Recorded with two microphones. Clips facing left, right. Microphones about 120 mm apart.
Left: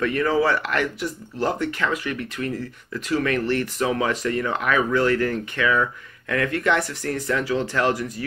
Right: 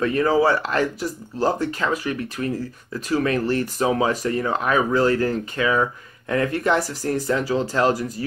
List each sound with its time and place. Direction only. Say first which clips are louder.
0.0 s speech: right 2 dB; 30° right (ahead or behind)